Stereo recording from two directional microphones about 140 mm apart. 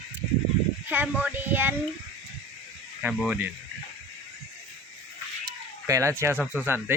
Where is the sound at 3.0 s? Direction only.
10° right (ahead or behind).